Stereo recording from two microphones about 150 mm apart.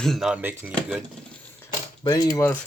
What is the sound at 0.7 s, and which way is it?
Speech, 5° left (ahead or behind).